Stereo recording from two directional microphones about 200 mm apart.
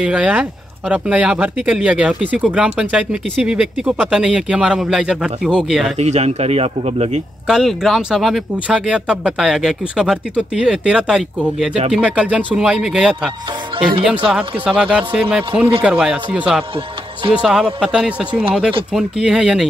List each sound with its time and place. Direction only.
0.0 s speech: 5° right (ahead or behind)
5.9 s speech: 35° right (ahead or behind)
7.4 s speech: centre (ahead or behind)
14.3 s speech: 5° right (ahead or behind)